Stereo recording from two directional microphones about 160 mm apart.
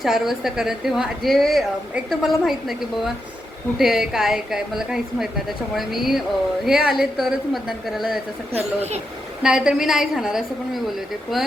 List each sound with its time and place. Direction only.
0.0 s a woman's voice: centre (ahead or behind)
8.5 s speech: 40° right (ahead or behind)
9.4 s a woman's voice: 5° right (ahead or behind)